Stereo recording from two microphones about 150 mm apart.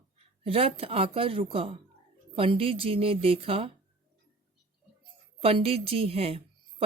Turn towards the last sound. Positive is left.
turn(degrees=-40)  # may be behind; listen again after turning